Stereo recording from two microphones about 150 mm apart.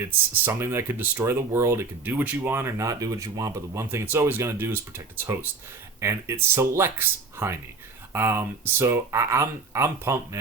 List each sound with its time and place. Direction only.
0.0 s speech: 15° right (ahead or behind)